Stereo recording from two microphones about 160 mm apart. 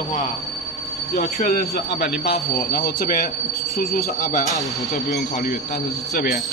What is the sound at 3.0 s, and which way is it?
Speech, 55° left (ahead or behind).